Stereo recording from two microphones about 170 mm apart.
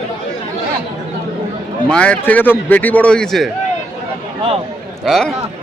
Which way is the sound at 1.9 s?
5° left (ahead or behind).